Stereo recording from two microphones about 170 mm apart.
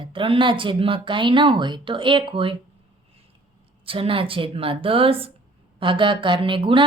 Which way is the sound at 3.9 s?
30° right (ahead or behind).